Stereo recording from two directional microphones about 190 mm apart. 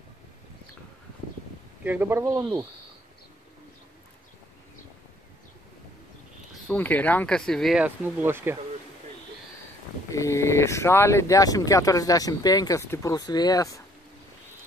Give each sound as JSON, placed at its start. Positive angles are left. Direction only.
{"t": 1.9, "sound": "speech", "side_deg": -10}
{"t": 6.7, "sound": "speech", "side_deg": 10}
{"t": 10.1, "sound": "speech", "side_deg": 15}